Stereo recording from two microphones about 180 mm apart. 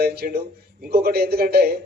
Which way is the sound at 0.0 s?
60° right (ahead or behind).